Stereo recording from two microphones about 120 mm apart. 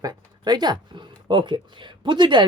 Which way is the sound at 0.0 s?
35° right (ahead or behind).